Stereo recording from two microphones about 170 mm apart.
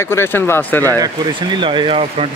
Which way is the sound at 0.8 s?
20° right (ahead or behind).